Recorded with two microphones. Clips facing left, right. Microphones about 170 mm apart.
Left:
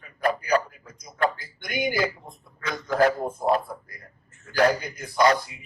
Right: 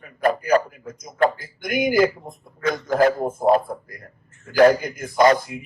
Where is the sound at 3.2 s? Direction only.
50° right (ahead or behind).